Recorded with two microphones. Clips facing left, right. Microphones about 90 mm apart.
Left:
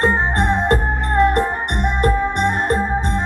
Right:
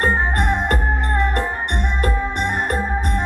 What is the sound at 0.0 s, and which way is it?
Music, 30° left (ahead or behind).